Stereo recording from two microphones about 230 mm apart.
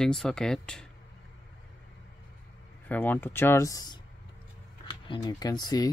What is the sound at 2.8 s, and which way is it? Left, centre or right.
Speech, centre.